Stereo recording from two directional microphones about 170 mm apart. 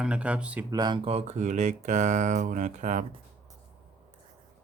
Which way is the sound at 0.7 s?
25° right (ahead or behind).